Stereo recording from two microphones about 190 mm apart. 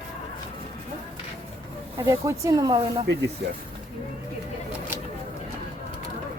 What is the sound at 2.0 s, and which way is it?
Speech, 15° right (ahead or behind).